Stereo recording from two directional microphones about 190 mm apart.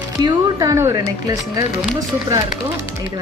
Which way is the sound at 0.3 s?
20° right (ahead or behind).